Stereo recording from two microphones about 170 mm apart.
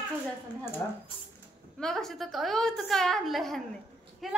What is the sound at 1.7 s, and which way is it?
A child's voice, 5° left (ahead or behind).